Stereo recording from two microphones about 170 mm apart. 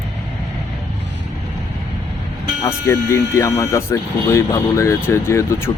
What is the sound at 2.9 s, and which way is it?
Speech, 15° left (ahead or behind).